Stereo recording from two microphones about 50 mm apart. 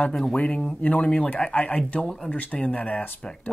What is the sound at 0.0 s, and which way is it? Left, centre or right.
Speech, centre.